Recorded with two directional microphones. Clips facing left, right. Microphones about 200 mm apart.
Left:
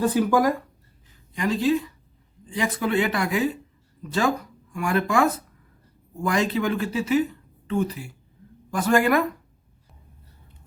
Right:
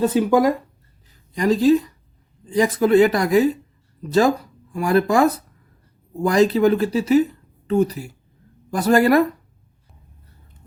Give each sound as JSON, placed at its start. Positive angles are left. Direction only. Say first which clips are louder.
{"t": 0.0, "sound": "speech", "louder": "right 4 dB", "side_deg": -20}
{"t": 1.4, "sound": "speech", "louder": "right 7 dB", "side_deg": -40}